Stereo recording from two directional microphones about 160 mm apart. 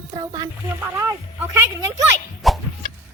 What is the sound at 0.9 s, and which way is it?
Speech, 15° right (ahead or behind).